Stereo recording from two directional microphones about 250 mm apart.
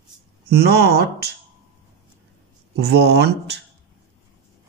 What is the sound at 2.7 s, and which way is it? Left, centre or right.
Speech, right.